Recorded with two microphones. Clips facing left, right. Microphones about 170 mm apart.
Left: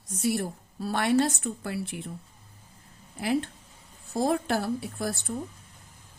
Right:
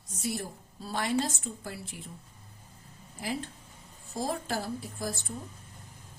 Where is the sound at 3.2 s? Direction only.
65° left (ahead or behind).